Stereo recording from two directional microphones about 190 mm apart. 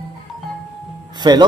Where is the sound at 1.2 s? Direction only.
20° right (ahead or behind).